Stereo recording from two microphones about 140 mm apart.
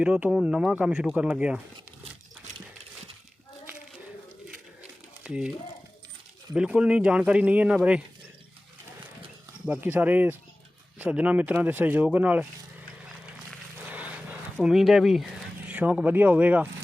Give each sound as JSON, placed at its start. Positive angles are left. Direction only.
{"t": 0.0, "sound": "speech", "side_deg": -5}
{"t": 2.5, "sound": "a sound", "side_deg": -55}
{"t": 5.2, "sound": "speech", "side_deg": -5}
{"t": 6.5, "sound": "speech", "side_deg": -5}
{"t": 9.6, "sound": "speech", "side_deg": -10}
{"t": 13.8, "sound": "a sound", "side_deg": -10}
{"t": 15.7, "sound": "speech", "side_deg": -10}